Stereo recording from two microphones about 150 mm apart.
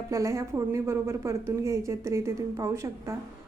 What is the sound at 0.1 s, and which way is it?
A woman's voice, 20° right (ahead or behind).